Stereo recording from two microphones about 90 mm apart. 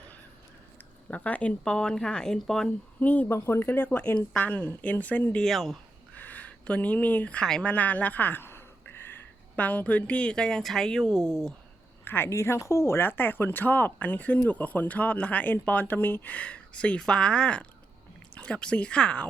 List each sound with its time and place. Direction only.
1.1 s speech: 15° left (ahead or behind)
3.0 s speech: 15° left (ahead or behind)
5.4 s speech: centre (ahead or behind)
6.1 s speech: 20° left (ahead or behind)
12.0 s speech: 25° left (ahead or behind)